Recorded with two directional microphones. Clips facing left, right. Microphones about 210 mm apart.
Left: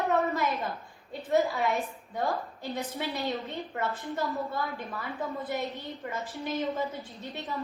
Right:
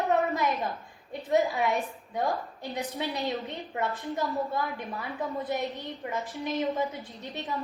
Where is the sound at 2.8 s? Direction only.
15° right (ahead or behind).